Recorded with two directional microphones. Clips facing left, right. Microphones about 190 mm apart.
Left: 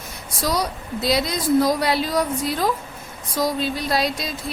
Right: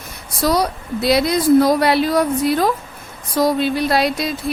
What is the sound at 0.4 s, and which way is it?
A woman's voice, 60° right (ahead or behind).